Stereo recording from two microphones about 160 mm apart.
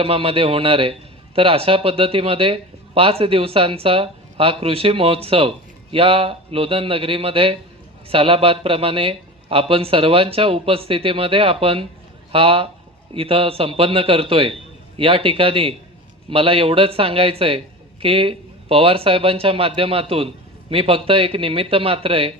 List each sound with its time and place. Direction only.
0.0 s speech: 35° right (ahead or behind)